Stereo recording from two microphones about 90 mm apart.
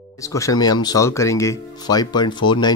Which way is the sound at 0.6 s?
50° left (ahead or behind).